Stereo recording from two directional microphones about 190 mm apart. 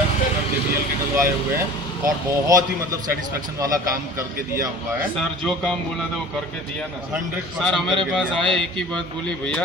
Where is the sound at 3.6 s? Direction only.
20° right (ahead or behind).